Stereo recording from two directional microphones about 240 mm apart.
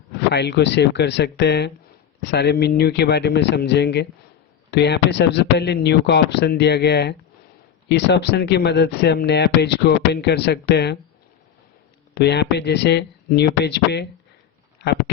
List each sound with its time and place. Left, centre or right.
0.2 s speech: left
12.1 s speech: left